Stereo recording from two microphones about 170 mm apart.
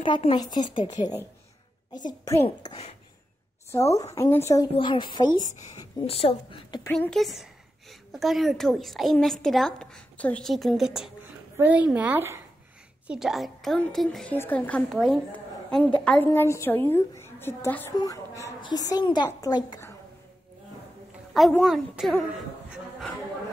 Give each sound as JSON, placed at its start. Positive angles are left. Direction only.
{"t": 0.0, "sound": "a woman's voice", "side_deg": 30}
{"t": 3.7, "sound": "speech", "side_deg": 15}
{"t": 4.7, "sound": "a woman's voice", "side_deg": 25}
{"t": 5.5, "sound": "a woman's voice", "side_deg": 45}
{"t": 6.9, "sound": "a woman's voice", "side_deg": 5}
{"t": 14.9, "sound": "a woman's voice", "side_deg": 0}
{"t": 21.3, "sound": "a woman's voice", "side_deg": 0}